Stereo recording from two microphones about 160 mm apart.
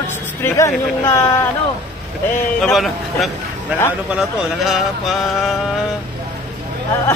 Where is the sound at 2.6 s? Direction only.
Centre (ahead or behind).